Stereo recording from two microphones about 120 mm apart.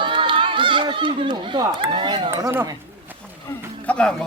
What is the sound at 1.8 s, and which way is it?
Speech, 45° right (ahead or behind).